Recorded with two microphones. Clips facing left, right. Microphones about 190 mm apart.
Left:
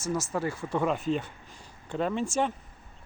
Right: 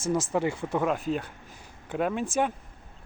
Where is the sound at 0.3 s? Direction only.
20° right (ahead or behind).